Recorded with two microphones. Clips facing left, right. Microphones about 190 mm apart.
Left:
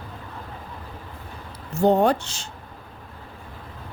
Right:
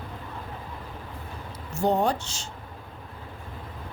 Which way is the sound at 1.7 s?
60° left (ahead or behind).